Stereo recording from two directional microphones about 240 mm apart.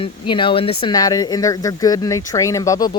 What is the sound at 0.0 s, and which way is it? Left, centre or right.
Speech, left.